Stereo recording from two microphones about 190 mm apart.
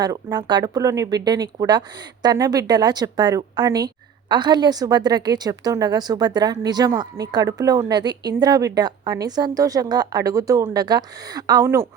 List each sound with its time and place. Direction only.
0.0 s speech: 20° right (ahead or behind)